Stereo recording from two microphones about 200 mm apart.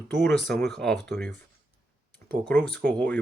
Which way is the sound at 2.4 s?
5° left (ahead or behind).